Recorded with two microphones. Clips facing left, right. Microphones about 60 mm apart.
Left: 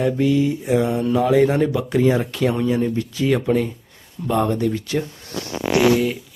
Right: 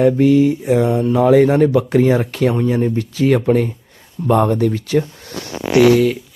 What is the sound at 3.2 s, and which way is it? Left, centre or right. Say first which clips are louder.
Speech: right 5 dB; right.